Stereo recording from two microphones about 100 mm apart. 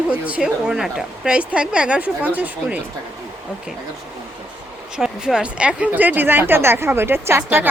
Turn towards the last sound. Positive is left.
turn(degrees=-20)  # may be behind; listen again after turning